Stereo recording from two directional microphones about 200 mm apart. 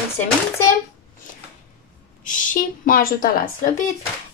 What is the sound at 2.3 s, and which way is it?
A woman's voice, 45° left (ahead or behind).